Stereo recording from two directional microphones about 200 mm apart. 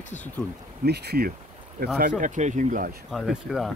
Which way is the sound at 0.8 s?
55° right (ahead or behind).